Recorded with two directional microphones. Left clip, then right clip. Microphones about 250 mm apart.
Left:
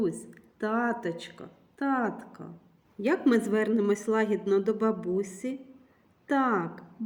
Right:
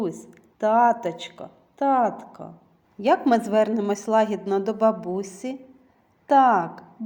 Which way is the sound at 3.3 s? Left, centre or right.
Right.